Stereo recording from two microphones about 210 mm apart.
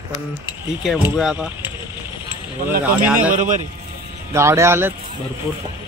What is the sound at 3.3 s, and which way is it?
Speech, 35° right (ahead or behind).